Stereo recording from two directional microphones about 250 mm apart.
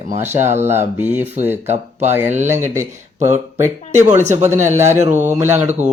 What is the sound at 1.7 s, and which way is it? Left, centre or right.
Speech, right.